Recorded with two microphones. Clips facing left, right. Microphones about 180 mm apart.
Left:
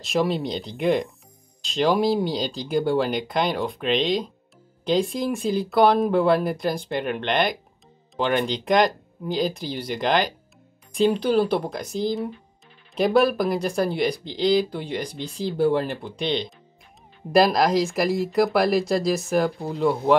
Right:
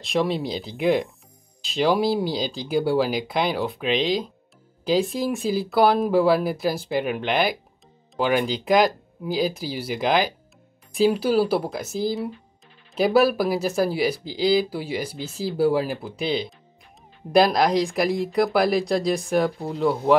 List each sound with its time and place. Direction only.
0.0 s speech: centre (ahead or behind)